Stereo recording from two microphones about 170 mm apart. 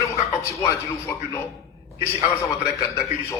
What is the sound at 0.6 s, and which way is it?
A man's voice, 15° left (ahead or behind).